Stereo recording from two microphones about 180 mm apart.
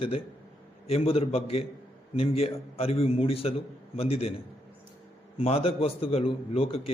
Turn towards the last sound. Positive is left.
turn(degrees=30)  # may be behind; listen again after turning